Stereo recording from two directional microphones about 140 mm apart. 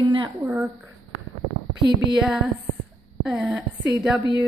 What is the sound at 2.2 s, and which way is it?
A woman's voice, 5° right (ahead or behind).